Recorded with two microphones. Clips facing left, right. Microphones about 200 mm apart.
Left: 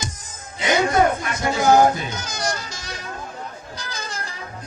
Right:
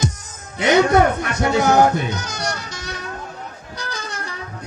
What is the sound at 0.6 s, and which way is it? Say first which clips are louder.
Music: right 4 dB; 65° right (ahead or behind).